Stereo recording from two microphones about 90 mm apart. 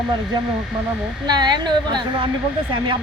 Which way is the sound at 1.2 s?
55° right (ahead or behind).